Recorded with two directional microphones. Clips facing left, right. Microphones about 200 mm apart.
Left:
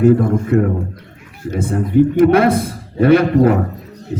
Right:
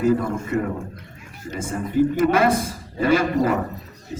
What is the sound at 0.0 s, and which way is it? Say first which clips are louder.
A man's voice: left 8 dB; 60° left (ahead or behind).